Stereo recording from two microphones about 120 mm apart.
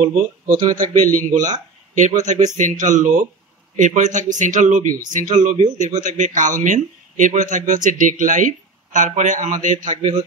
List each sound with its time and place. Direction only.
0.6 s a man's voice: 35° right (ahead or behind)
0.9 s a man's voice: 90° right